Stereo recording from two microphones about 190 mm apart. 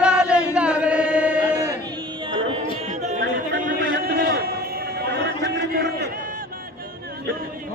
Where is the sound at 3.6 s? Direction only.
50° right (ahead or behind).